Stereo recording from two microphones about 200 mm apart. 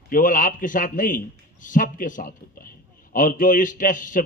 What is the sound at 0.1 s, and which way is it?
A man's voice, 40° left (ahead or behind).